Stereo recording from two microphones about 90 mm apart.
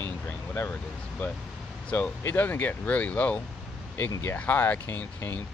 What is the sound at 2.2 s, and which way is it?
Speech, 20° left (ahead or behind).